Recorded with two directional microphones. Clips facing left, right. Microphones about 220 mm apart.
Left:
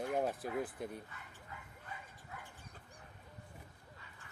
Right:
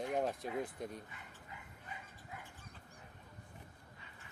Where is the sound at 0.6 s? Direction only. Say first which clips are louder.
Left 1 dB; 5° left (ahead or behind).